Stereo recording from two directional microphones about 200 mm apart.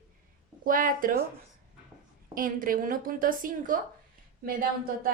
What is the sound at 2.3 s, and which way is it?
A woman's voice, 45° right (ahead or behind).